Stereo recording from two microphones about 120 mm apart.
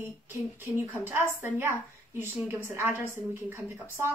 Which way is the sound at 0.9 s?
15° right (ahead or behind).